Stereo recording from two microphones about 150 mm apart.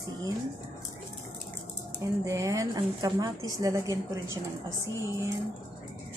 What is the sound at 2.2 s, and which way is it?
A woman's voice, 20° right (ahead or behind).